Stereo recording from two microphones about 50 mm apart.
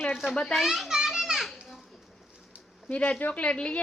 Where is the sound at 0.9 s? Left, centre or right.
Centre.